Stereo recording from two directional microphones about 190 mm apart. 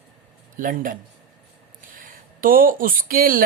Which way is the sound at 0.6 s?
45° right (ahead or behind).